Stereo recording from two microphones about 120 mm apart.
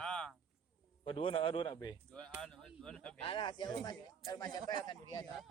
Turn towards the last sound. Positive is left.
turn(degrees=35)  # may be behind; listen again after turning